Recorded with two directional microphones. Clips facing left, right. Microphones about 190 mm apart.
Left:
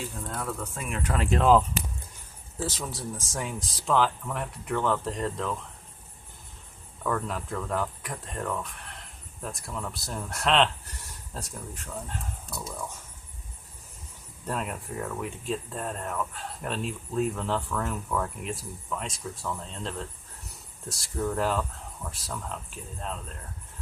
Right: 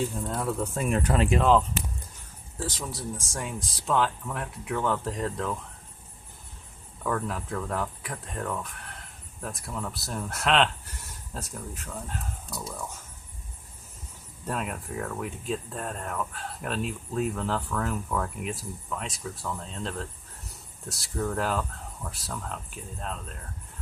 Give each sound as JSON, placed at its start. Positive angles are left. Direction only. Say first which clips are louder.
{"t": 0.3, "sound": "speech", "louder": "right 5 dB", "side_deg": -30}
{"t": 1.4, "sound": "speech", "louder": "left 5 dB", "side_deg": 5}
{"t": 7.0, "sound": "speech", "louder": "even", "side_deg": 0}
{"t": 14.4, "sound": "speech", "louder": "even", "side_deg": 0}